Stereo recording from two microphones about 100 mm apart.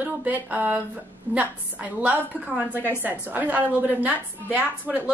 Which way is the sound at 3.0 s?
15° right (ahead or behind).